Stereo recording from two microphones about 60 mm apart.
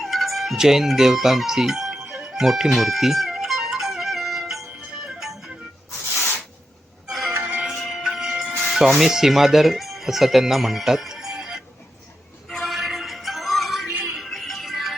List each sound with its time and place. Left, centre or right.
0.0 s music: centre
7.1 s music: centre
7.3 s music: right
7.6 s music: centre
8.5 s speech: centre
12.5 s a sound: centre
12.7 s music: centre